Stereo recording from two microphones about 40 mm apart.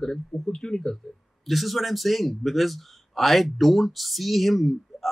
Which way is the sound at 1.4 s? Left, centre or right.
Centre.